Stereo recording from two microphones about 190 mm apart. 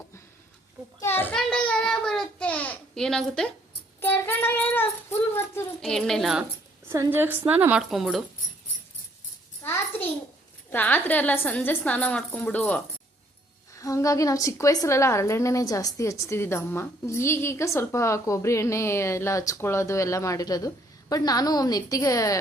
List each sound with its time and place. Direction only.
1.0 s child singing: 10° left (ahead or behind)
4.0 s speech: 10° left (ahead or behind)
5.8 s speech: centre (ahead or behind)
6.8 s a woman's voice: 15° right (ahead or behind)
9.6 s a sound: 10° left (ahead or behind)
10.7 s a woman's voice: 10° left (ahead or behind)